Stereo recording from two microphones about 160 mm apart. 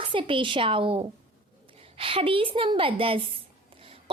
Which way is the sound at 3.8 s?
35° right (ahead or behind).